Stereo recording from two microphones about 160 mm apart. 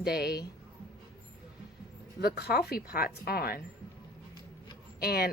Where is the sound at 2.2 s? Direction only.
80° left.